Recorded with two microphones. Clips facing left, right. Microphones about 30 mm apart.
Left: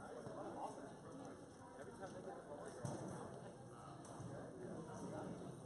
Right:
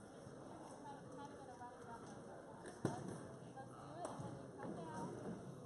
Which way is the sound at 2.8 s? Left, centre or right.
Right.